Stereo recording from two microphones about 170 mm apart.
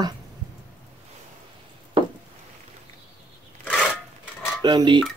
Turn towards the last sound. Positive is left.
turn(degrees=-25)  # may be behind; listen again after turning